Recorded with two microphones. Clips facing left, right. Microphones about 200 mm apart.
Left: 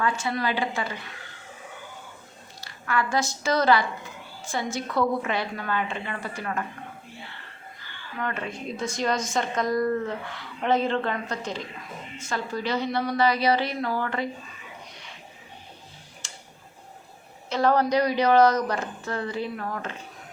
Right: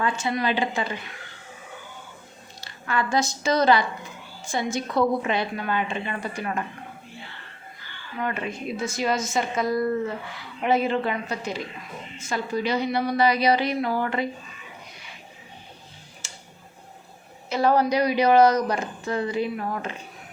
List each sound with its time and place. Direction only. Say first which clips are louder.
0.0 s a woman's voice: right 1 dB; 20° right (ahead or behind)
2.6 s a woman's voice: even; 20° right (ahead or behind)
8.2 s a woman's voice: right 2 dB; 10° right (ahead or behind)
16.2 s tick-tock: even; 5° right (ahead or behind)
17.5 s a woman's voice: right 1 dB; 10° right (ahead or behind)